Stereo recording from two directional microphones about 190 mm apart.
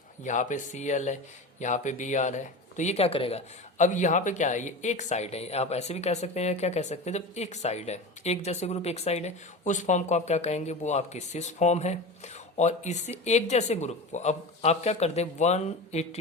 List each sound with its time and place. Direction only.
0.3 s speech: 40° left (ahead or behind)